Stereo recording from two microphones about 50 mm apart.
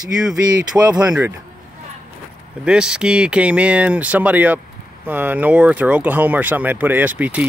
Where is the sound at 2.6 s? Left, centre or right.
Centre.